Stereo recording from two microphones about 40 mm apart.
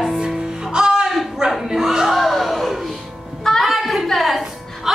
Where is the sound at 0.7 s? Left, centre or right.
Centre.